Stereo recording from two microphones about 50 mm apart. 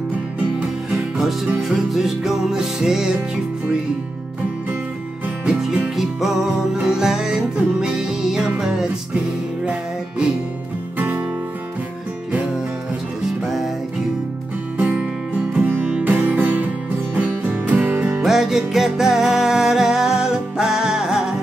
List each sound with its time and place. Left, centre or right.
0.8 s music: centre
5.4 s music: centre
11.0 s music: right
15.6 s music: right
18.2 s music: centre